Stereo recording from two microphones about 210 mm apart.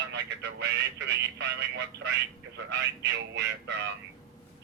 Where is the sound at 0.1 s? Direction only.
55° right (ahead or behind).